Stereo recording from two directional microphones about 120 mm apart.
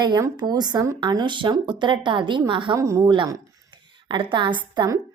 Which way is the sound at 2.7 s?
25° right (ahead or behind).